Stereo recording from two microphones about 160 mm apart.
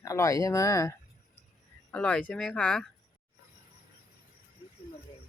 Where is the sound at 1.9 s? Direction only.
10° left (ahead or behind).